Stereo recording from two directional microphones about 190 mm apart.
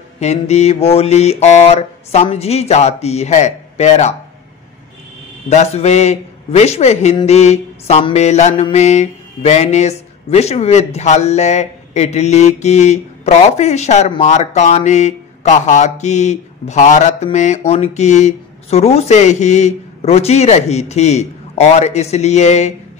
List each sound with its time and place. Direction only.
0.2 s mantra: 35° left (ahead or behind)
5.5 s mantra: 35° left (ahead or behind)